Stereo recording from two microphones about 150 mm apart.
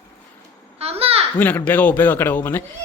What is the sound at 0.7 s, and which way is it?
Babbling, 40° right (ahead or behind).